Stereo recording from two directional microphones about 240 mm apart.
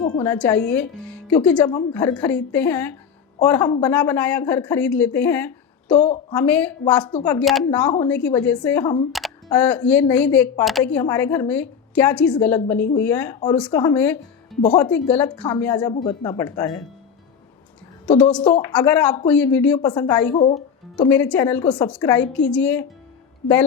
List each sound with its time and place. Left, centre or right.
0.3 s a woman's voice: centre
18.2 s a woman's voice: centre; by 20.7 s left
20.9 s speech: centre